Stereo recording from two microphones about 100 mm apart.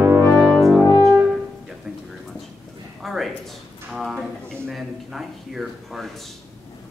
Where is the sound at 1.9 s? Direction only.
5° right (ahead or behind).